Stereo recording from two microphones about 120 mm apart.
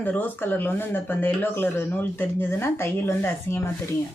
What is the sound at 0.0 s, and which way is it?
Speech, 15° left (ahead or behind).